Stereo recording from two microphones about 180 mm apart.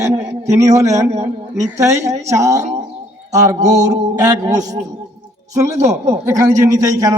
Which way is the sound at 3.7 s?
20° right (ahead or behind).